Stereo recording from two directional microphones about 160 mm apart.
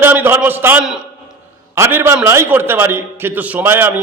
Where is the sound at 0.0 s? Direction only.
15° right (ahead or behind).